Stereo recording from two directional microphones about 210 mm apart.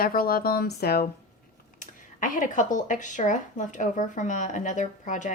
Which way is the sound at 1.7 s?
40° left (ahead or behind).